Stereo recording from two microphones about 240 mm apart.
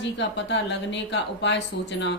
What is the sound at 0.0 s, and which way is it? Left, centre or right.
A woman's voice, left.